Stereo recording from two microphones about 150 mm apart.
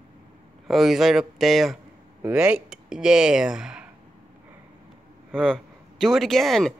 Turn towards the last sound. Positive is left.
turn(degrees=0)  # may be behind; listen again after turning